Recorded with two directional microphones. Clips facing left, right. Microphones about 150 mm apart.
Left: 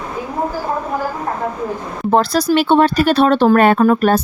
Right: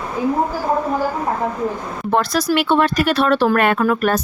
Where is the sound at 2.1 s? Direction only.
30° left (ahead or behind).